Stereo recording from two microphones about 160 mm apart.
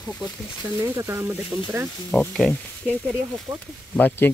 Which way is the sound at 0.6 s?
15° right (ahead or behind).